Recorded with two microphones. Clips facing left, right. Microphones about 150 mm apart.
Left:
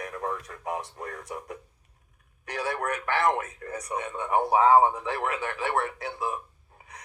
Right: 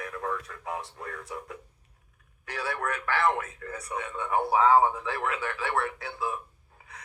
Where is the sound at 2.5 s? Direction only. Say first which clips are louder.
Left 2 dB; 40° left (ahead or behind).